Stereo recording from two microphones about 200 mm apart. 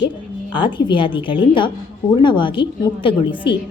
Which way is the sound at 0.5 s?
25° left (ahead or behind).